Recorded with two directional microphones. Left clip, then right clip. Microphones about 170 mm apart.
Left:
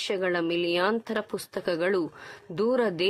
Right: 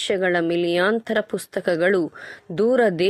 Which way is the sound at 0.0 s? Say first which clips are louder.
Right 6 dB; 20° right (ahead or behind).